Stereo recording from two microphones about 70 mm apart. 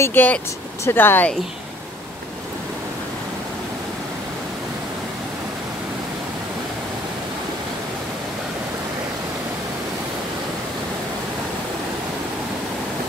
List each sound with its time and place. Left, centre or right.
0.0 s speech: left